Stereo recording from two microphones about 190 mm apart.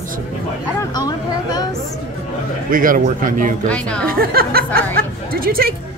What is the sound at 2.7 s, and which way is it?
Speech, 45° right (ahead or behind).